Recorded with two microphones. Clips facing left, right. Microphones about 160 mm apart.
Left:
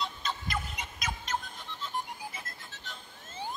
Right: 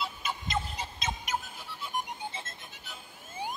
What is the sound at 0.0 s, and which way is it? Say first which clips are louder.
Fowl: even; 10° right (ahead or behind).